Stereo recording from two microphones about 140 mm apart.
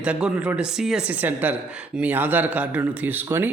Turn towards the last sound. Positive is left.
turn(degrees=-15)  # may be behind; listen again after turning